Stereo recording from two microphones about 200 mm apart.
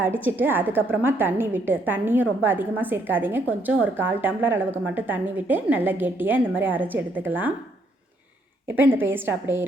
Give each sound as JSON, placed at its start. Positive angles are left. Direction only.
{"t": 0.2, "sound": "a woman's voice", "side_deg": -10}
{"t": 8.6, "sound": "a woman's voice", "side_deg": -10}